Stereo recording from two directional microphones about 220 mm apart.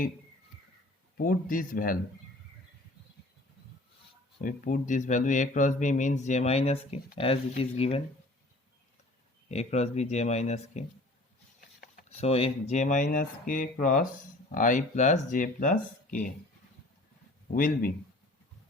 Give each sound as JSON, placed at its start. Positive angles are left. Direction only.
{"t": 1.2, "sound": "speech", "side_deg": 40}
{"t": 4.4, "sound": "speech", "side_deg": 35}
{"t": 9.5, "sound": "speech", "side_deg": 30}
{"t": 17.5, "sound": "speech", "side_deg": 40}